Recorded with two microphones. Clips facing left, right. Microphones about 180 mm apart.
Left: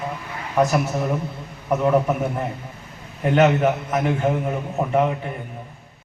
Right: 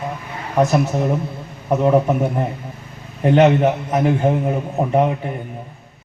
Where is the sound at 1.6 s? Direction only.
30° right (ahead or behind).